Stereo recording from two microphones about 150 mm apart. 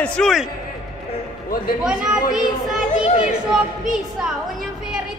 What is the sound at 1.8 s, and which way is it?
Speech, 5° right (ahead or behind).